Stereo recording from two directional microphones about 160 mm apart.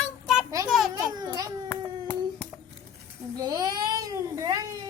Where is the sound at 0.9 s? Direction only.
25° right (ahead or behind).